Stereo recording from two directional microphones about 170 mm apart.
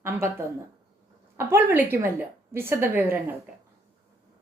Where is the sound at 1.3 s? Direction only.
15° right (ahead or behind).